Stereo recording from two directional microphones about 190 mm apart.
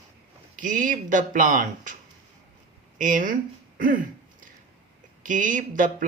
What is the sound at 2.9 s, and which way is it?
Speech, 45° right (ahead or behind).